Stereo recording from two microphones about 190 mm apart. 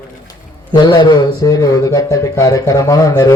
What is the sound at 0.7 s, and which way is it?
Speech, 25° left (ahead or behind).